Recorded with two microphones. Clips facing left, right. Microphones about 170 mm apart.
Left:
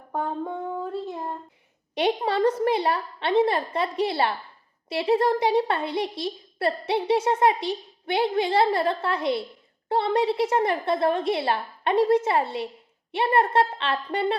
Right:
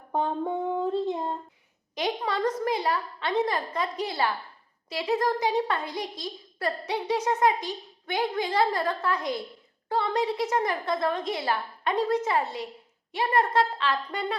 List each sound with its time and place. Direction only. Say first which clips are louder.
0.1 s music: right 1 dB; 20° right (ahead or behind)
2.0 s a woman's voice: left 5 dB; 30° left (ahead or behind)